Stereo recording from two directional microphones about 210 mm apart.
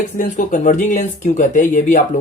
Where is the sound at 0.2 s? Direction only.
40° left (ahead or behind).